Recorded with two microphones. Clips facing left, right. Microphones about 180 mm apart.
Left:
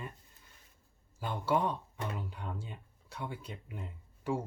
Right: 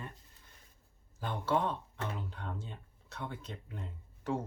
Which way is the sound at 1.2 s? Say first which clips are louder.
Left 1 dB; 10° left (ahead or behind).